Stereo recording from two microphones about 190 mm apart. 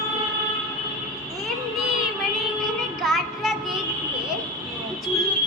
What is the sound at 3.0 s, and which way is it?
Music, centre (ahead or behind).